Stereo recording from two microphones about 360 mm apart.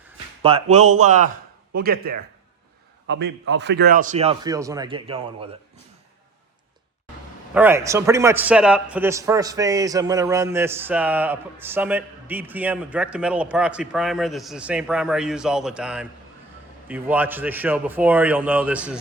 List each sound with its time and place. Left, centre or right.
0.4 s a man's voice: centre
7.5 s a man's voice: centre